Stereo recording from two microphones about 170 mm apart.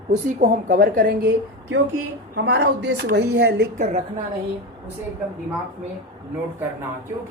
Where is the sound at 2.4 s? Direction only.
90° right; by 3.6 s 70° right (ahead or behind).